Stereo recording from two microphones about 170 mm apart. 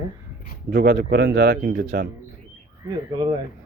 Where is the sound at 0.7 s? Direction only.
75° right (ahead or behind).